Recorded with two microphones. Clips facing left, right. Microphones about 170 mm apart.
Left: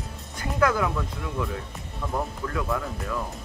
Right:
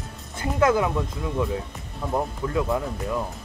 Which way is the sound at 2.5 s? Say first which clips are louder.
Right 6 dB; 25° right (ahead or behind).